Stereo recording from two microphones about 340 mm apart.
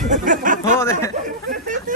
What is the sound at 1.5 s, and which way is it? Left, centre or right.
Speech, right.